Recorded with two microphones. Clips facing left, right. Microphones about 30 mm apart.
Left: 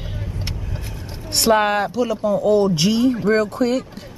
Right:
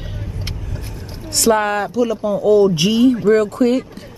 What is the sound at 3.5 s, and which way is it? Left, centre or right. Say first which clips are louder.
Speech: right 4 dB; centre.